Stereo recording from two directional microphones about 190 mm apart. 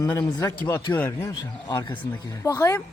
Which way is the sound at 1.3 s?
25° left (ahead or behind).